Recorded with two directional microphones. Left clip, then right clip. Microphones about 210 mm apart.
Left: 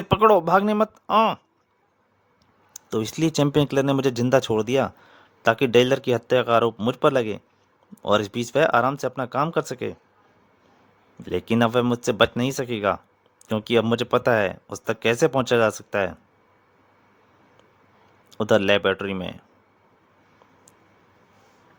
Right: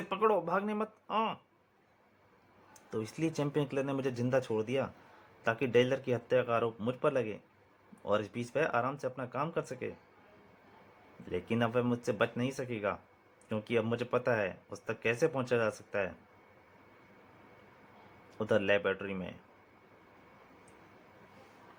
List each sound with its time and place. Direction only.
0.1 s speech: 55° left (ahead or behind)
2.7 s speech: 50° left (ahead or behind)
11.3 s speech: 55° left (ahead or behind)
18.3 s speech: 50° left (ahead or behind)